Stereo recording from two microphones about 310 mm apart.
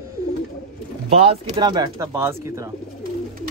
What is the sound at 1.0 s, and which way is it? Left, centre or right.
Speech, centre.